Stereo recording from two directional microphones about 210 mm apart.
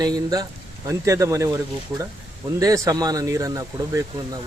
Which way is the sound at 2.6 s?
15° right (ahead or behind).